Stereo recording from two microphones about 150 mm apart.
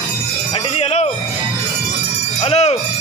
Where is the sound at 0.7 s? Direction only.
45° left (ahead or behind).